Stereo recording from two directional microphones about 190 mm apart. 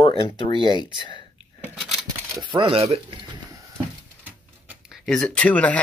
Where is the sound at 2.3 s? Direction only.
25° right (ahead or behind).